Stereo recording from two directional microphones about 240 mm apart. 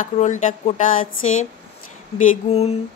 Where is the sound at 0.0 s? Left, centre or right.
Left.